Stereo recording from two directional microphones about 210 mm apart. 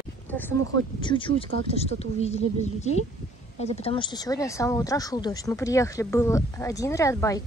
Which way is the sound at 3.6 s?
30° left (ahead or behind).